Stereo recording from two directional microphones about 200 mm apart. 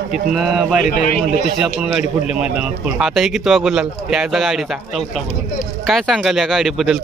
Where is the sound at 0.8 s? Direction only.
40° left (ahead or behind).